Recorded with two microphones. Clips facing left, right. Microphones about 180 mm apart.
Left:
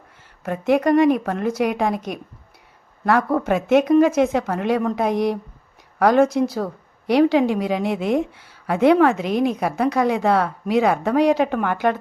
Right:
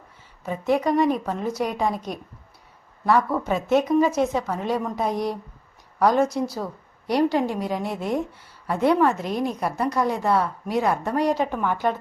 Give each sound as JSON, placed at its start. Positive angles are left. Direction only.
{"t": 0.4, "sound": "a woman's voice", "side_deg": 70}
{"t": 2.0, "sound": "speech", "side_deg": 20}
{"t": 3.4, "sound": "a woman's voice", "side_deg": 90}
{"t": 6.0, "sound": "a woman's voice", "side_deg": 90}